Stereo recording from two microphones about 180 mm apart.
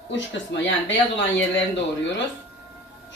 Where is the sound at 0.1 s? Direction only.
85° left.